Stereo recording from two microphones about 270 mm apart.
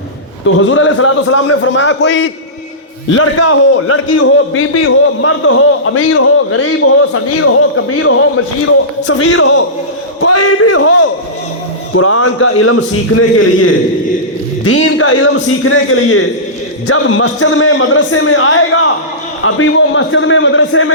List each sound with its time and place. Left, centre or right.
0.4 s a man's voice: left
3.1 s a man's voice: left